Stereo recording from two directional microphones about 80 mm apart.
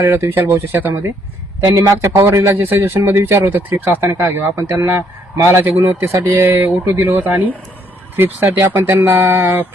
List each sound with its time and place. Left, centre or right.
0.0 s speech: right
1.6 s speech: right
2.6 s speech: right